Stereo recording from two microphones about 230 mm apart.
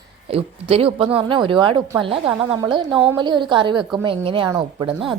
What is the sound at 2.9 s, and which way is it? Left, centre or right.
Speech, centre.